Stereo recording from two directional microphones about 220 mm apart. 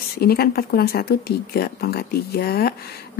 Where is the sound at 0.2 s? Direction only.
45° left (ahead or behind).